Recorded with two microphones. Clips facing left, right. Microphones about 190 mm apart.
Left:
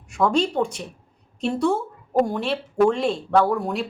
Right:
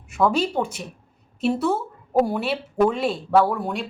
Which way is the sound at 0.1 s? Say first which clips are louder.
Even; 5° right (ahead or behind).